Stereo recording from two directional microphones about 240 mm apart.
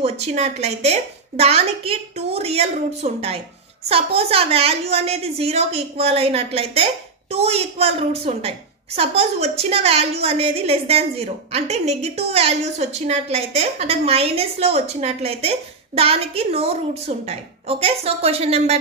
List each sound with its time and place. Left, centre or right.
0.0 s a woman's voice: right